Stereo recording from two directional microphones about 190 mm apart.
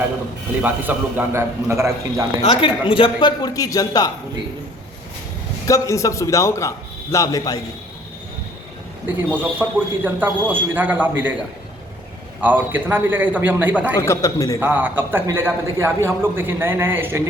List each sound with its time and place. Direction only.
0.6 s a man's voice: 10° right (ahead or behind)
2.4 s a man's voice: 30° left (ahead or behind)
5.6 s a man's voice: 15° left (ahead or behind)
9.1 s a man's voice: 10° right (ahead or behind)
12.4 s a man's voice: 10° right (ahead or behind)
14.0 s a man's voice: 15° left (ahead or behind)
14.6 s a man's voice: 10° right (ahead or behind)